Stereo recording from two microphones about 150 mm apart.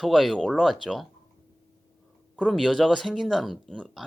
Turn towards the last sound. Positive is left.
turn(degrees=0)  # may be behind; listen again after turning